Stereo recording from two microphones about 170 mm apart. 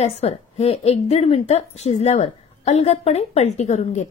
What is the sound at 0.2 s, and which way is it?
A woman's voice, 35° left (ahead or behind).